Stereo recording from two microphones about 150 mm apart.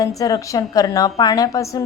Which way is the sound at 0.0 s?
25° left (ahead or behind).